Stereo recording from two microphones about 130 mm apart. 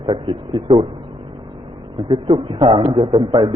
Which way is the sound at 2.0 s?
40° right (ahead or behind).